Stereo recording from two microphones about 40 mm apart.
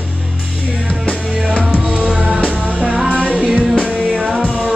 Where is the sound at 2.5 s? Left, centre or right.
Right.